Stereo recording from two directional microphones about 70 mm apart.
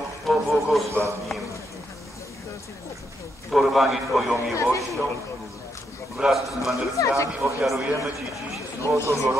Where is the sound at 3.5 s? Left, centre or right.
Centre.